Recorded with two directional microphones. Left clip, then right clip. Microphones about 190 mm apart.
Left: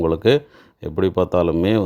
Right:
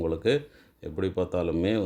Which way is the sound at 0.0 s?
40° left (ahead or behind).